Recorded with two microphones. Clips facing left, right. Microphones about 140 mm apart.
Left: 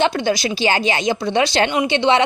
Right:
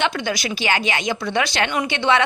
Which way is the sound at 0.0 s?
30° left (ahead or behind).